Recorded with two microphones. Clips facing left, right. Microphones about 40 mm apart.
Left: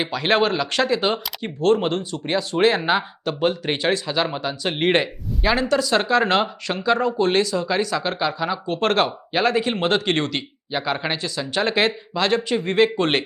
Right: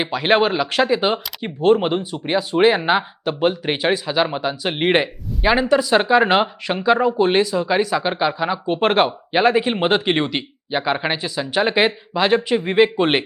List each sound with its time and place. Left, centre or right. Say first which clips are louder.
0.0 s speech: right 3 dB; centre